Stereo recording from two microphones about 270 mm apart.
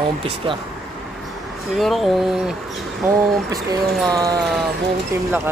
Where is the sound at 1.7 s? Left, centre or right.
Centre.